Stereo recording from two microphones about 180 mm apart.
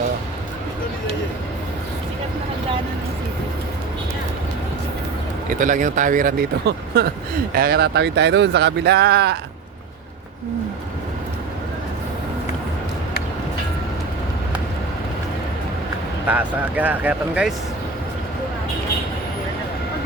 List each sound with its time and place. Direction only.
5.5 s speech: 45° right (ahead or behind); by 9.4 s 65° right (ahead or behind)
16.2 s speech: 10° right (ahead or behind)